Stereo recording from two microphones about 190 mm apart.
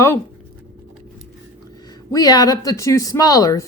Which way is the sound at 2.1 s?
20° left (ahead or behind).